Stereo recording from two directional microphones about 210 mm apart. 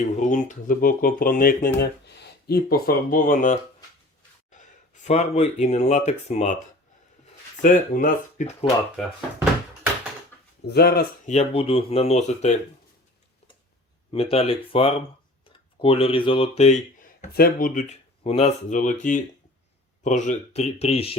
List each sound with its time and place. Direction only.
0.0 s speech: 35° left (ahead or behind)
1.8 s speech: 50° left (ahead or behind); by 6.6 s 35° left (ahead or behind)
7.6 s speech: 40° left (ahead or behind)
10.7 s speech: 50° left (ahead or behind)
11.3 s speech: 30° left (ahead or behind)
14.1 s speech: 25° left (ahead or behind)